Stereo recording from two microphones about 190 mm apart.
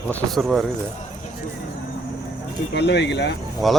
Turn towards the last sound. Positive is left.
turn(degrees=0)  # may be behind; listen again after turning